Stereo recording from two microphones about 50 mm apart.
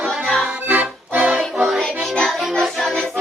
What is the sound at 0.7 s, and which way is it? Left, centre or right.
Music, right.